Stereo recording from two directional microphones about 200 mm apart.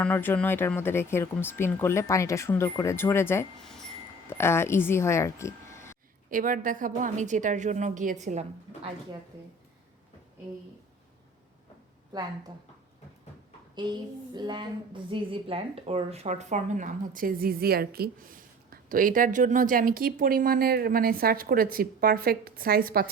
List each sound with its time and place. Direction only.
0.0 s speech: 10° left (ahead or behind)
3.6 s wind chime: centre (ahead or behind)
6.3 s a woman's voice: 40° right (ahead or behind)
13.7 s a sound: 20° right (ahead or behind)
15.1 s a woman's voice: 25° right (ahead or behind); by 23.0 s 50° right (ahead or behind)